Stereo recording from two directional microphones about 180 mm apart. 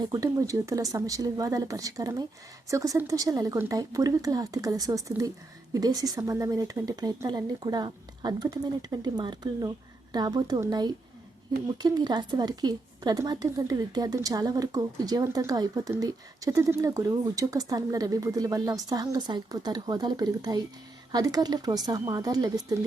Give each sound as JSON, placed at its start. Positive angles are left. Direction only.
{"t": 0.0, "sound": "speech", "side_deg": -20}